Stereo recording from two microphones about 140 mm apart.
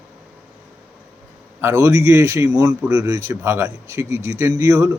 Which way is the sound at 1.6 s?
20° right (ahead or behind).